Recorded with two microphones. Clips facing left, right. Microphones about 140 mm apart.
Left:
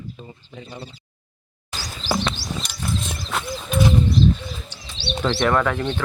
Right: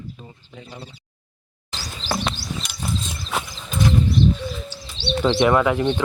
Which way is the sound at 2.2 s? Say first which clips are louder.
Left 1 dB; centre (ahead or behind).